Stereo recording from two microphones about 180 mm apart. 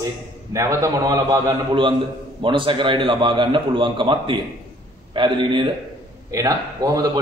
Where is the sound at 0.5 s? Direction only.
15° right (ahead or behind).